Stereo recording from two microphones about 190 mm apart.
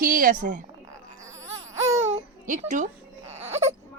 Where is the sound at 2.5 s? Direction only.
40° right (ahead or behind).